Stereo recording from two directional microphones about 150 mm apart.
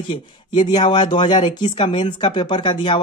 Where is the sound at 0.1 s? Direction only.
30° left (ahead or behind).